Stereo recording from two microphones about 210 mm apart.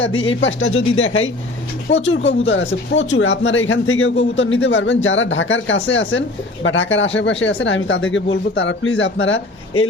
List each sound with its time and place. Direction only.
0.3 s speech: 65° left (ahead or behind)